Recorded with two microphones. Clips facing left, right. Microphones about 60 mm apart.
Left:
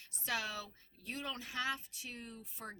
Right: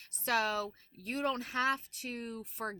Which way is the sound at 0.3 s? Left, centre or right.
Right.